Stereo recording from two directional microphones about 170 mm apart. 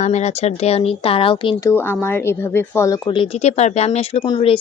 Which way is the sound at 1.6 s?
15° left (ahead or behind).